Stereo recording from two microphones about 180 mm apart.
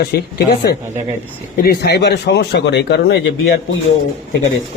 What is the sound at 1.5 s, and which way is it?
Speech, 60° left (ahead or behind).